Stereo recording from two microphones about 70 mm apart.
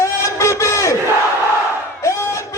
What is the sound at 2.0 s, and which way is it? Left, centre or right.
Crowd, left.